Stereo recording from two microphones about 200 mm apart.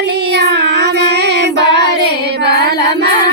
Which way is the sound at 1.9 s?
50° right (ahead or behind).